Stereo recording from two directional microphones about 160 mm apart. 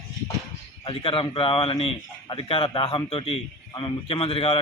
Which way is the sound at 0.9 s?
35° left (ahead or behind).